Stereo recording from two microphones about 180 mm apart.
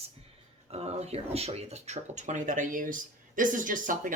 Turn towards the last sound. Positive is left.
turn(degrees=-45)  # may be behind; listen again after turning